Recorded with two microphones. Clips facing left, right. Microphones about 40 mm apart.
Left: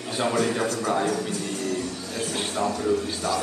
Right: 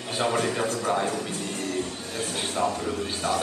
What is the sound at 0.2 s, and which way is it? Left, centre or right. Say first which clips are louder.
A man's voice: left 1 dB; right.